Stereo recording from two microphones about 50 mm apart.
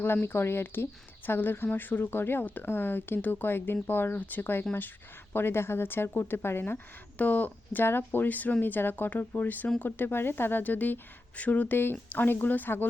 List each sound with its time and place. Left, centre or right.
0.0 s speech: left
7.2 s speech: left
7.9 s speech: left
10.6 s speech: left
11.8 s speech: left